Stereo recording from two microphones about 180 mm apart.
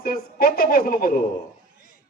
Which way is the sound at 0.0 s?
55° left (ahead or behind).